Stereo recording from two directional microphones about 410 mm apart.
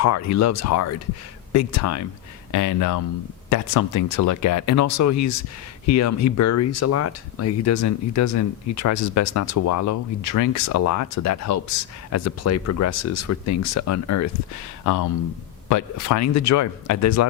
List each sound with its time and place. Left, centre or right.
0.0 s speech: left